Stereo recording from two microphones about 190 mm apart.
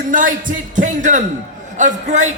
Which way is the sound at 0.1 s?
45° right (ahead or behind).